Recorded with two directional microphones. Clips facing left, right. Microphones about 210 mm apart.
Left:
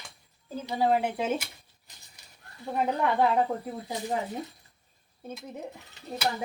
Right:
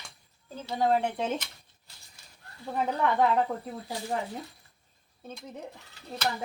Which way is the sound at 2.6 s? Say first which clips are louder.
Left 1 dB; 15° left (ahead or behind).